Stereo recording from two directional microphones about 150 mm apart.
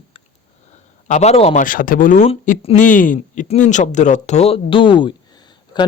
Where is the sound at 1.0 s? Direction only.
50° left (ahead or behind).